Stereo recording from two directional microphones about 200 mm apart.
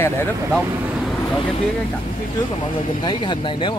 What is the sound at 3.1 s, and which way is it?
Speech, 25° left (ahead or behind).